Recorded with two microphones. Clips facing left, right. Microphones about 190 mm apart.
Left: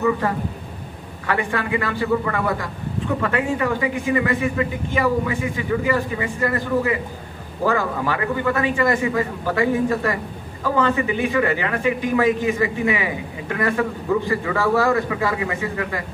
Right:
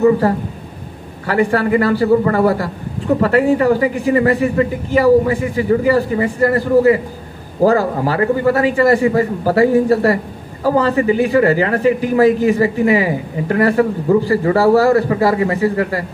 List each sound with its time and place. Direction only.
0.2 s a man's voice: 35° right (ahead or behind)